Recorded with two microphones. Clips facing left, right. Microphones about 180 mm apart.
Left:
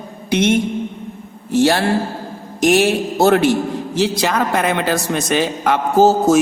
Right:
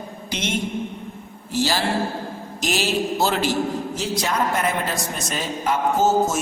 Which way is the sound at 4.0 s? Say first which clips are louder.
Left 8 dB; 80° left.